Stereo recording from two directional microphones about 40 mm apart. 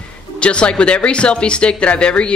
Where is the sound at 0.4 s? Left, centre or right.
Left.